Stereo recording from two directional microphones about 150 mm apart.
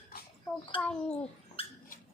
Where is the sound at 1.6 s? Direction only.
40° left (ahead or behind).